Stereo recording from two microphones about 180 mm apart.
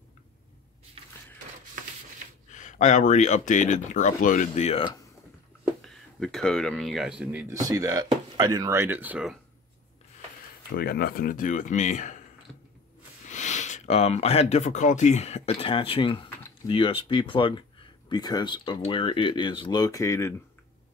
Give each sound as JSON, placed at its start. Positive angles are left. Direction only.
{"t": 1.0, "sound": "crushing", "side_deg": -35}
{"t": 2.5, "sound": "speech", "side_deg": 45}
{"t": 6.1, "sound": "speech", "side_deg": 0}
{"t": 7.6, "sound": "speech", "side_deg": -20}
{"t": 10.8, "sound": "speech", "side_deg": 60}
{"t": 13.3, "sound": "speech", "side_deg": 40}